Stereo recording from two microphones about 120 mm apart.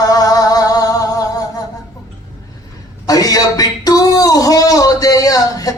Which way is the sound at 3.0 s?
30° left (ahead or behind).